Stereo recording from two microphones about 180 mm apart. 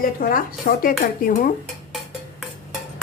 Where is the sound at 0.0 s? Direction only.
50° left (ahead or behind).